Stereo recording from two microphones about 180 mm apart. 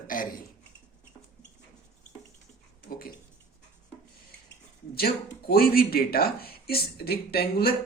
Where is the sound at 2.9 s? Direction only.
55° left (ahead or behind).